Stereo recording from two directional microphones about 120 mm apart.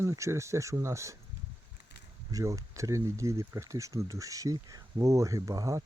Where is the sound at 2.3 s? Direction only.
30° right (ahead or behind).